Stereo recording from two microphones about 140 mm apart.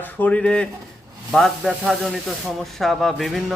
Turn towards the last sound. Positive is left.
turn(degrees=0)  # may be behind; listen again after turning